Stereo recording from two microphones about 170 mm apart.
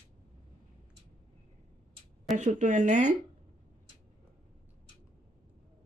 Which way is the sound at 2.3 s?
45° right (ahead or behind).